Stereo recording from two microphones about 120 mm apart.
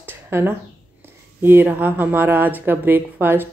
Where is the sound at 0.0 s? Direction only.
20° right (ahead or behind).